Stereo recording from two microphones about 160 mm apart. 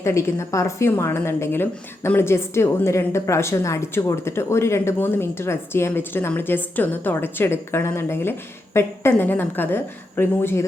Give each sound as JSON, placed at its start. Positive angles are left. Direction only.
{"t": 0.0, "sound": "a woman's voice", "side_deg": 15}